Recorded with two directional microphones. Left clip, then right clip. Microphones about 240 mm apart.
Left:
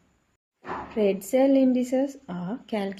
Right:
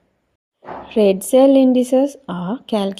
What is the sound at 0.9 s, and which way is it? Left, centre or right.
A woman's voice, right.